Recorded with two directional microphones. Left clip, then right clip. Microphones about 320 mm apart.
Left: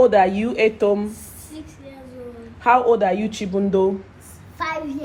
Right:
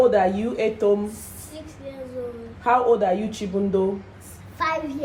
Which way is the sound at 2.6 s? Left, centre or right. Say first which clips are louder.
Left 3 dB; left.